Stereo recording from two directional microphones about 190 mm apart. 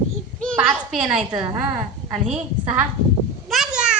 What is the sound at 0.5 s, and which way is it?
Speech, 5° right (ahead or behind).